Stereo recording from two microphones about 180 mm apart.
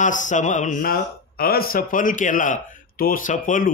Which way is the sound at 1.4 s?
55° left (ahead or behind).